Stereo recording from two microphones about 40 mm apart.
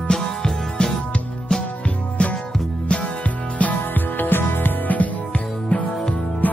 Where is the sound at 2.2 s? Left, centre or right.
Left.